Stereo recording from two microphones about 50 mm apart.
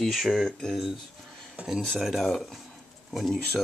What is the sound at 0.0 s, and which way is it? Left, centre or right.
Speech, centre.